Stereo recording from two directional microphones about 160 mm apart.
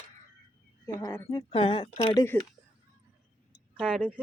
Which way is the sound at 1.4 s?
35° left (ahead or behind).